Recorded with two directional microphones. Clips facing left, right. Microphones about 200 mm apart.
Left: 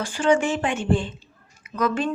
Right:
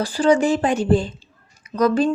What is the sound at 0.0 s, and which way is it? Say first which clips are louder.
A woman's voice: right 4 dB; 35° right (ahead or behind).